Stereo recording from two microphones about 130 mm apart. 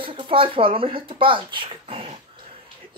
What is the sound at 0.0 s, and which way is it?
Speech, 40° right (ahead or behind).